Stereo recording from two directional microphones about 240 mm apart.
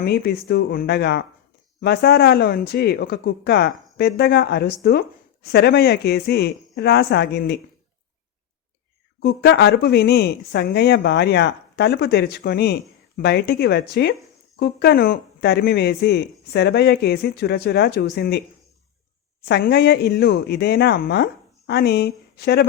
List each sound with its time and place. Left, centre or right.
0.0 s speech: left
9.2 s speech: left
19.5 s speech: left